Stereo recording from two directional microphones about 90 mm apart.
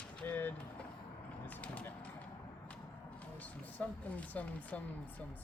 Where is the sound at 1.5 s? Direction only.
15° left (ahead or behind).